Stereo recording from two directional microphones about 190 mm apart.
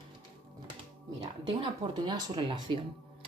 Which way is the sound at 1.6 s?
20° right (ahead or behind).